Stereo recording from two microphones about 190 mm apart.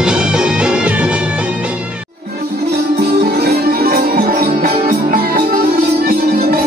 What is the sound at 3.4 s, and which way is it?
Music, 55° right (ahead or behind).